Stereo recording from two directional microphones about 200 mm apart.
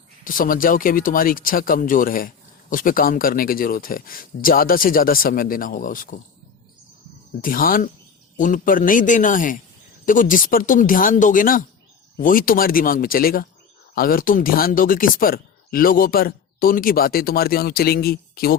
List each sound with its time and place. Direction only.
0.3 s speech: 45° left (ahead or behind)
7.4 s a man's voice: 45° left (ahead or behind)